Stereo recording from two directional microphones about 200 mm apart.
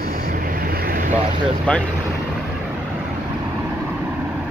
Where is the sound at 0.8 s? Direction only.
45° right (ahead or behind).